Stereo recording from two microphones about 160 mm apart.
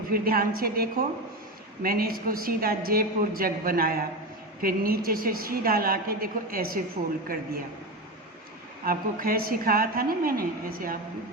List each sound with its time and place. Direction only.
0.1 s a woman's voice: 65° right (ahead or behind)
8.8 s a woman's voice: 65° right (ahead or behind)